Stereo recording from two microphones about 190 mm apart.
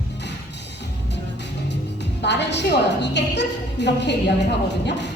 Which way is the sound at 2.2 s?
65° left (ahead or behind).